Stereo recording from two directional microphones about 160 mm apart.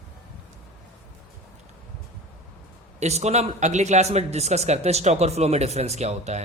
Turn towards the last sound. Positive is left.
turn(degrees=-45)  # may be behind; listen again after turning